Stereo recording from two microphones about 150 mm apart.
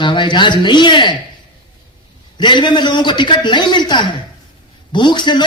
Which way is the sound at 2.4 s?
30° left (ahead or behind).